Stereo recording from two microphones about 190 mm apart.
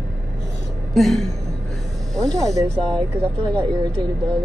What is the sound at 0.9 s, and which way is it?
A woman's voice, centre (ahead or behind).